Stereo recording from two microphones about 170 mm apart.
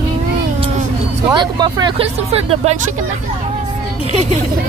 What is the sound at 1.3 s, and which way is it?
Speech, 25° right (ahead or behind).